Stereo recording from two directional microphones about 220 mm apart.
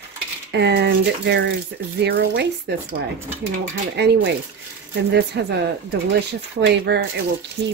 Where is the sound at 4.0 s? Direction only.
55° right (ahead or behind).